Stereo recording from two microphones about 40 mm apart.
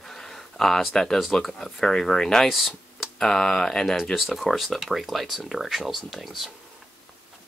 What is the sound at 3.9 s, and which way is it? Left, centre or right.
Speech, centre.